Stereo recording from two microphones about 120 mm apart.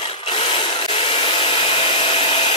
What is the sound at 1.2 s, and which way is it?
Hair dryer, 45° left (ahead or behind).